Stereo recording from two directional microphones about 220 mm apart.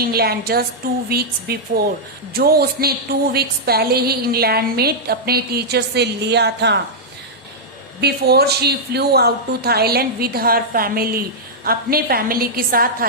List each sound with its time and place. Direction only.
0.0 s a woman's voice: 45° right (ahead or behind)
8.0 s a woman's voice: 45° right (ahead or behind)